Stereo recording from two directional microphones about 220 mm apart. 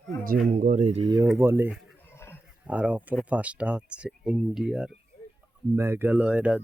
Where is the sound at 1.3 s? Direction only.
10° right (ahead or behind).